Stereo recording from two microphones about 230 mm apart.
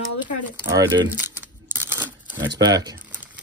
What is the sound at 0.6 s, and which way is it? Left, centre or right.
Crumpling, centre.